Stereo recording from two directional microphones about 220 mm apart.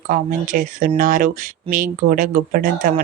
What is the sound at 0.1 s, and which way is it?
Speech, 40° right (ahead or behind).